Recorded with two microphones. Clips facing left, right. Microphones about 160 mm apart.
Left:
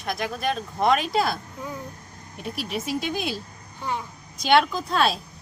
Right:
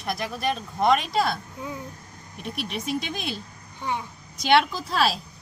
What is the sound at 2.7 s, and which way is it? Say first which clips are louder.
Speech: left 2 dB; 5° left (ahead or behind).